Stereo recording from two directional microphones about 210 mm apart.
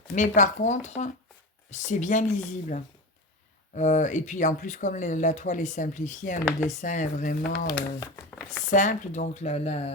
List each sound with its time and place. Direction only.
0.1 s speech: 35° left (ahead or behind)
7.8 s speech: 15° left (ahead or behind)
8.7 s speech: 35° left (ahead or behind)